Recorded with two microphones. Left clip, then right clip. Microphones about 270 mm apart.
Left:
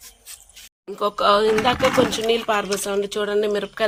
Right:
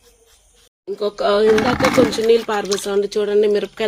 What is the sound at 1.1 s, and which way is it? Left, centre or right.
Speech, centre.